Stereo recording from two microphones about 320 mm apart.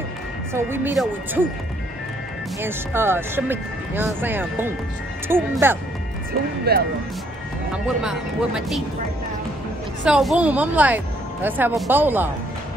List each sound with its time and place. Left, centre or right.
0.5 s speech: centre
2.6 s speech: centre
6.7 s speech: right
8.0 s a woman's voice: centre
10.0 s a woman's voice: centre